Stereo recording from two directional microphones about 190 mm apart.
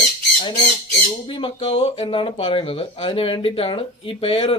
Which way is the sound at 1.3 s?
25° left (ahead or behind).